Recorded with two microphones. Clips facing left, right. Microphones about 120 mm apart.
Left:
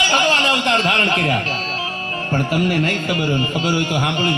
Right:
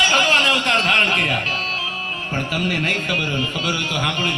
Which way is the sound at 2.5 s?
30° left (ahead or behind).